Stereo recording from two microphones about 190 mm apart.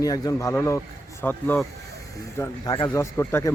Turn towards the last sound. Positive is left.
turn(degrees=15)  # may be behind; listen again after turning